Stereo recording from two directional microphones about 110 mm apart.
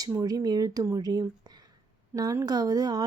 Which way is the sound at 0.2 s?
35° right (ahead or behind).